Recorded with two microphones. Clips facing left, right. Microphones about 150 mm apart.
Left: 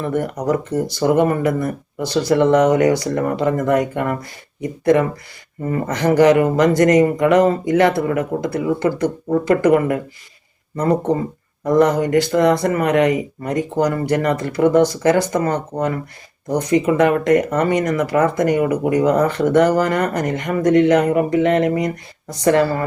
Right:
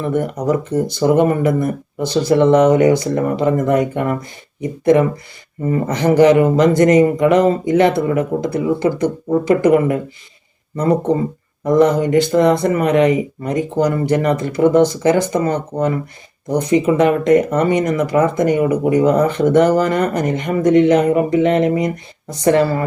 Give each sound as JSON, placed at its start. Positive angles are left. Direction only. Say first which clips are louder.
{"t": 0.0, "sound": "speech", "louder": "right 2 dB", "side_deg": -20}